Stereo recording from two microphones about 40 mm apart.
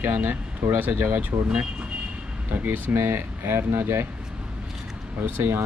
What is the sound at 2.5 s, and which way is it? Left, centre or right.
Speech, right.